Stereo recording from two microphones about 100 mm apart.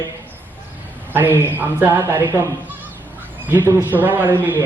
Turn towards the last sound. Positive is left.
turn(degrees=-20)  # may be behind; listen again after turning